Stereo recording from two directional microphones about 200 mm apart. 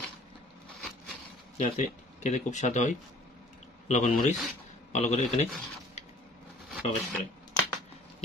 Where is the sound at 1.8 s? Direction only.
35° left (ahead or behind).